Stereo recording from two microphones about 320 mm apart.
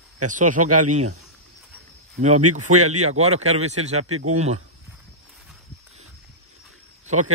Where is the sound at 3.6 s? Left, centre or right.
Centre.